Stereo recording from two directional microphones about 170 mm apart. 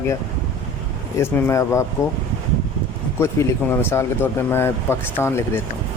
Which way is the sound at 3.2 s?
15° left (ahead or behind).